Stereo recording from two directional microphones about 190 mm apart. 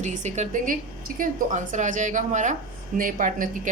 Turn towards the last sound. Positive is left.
turn(degrees=-45)  # may be behind; listen again after turning